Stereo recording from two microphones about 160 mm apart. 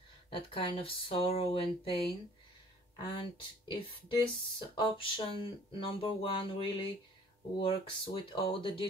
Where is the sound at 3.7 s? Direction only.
35° left (ahead or behind).